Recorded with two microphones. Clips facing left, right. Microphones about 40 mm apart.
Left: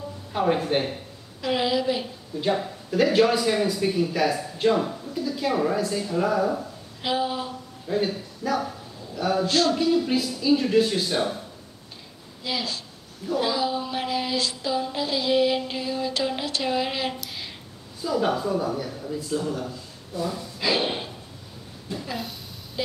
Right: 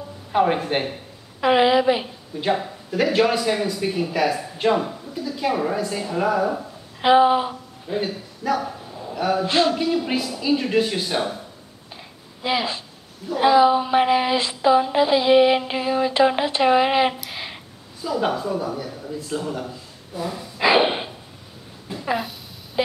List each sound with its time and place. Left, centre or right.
0.3 s a woman's voice: right
2.9 s speech: centre
7.0 s speech: right
8.0 s speech: centre
9.5 s a sound: right
10.1 s speech: centre
12.4 s a sound: right
18.3 s speech: centre
19.2 s speech: centre
20.5 s snort: right
21.9 s a sound: centre